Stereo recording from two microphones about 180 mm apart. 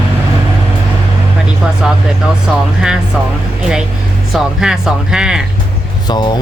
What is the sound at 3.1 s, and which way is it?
Speech, 5° right (ahead or behind).